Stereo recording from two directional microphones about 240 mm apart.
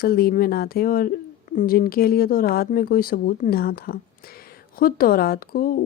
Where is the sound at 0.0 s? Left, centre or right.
Left.